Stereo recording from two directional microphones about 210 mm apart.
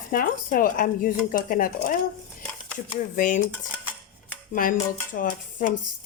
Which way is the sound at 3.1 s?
40° left (ahead or behind).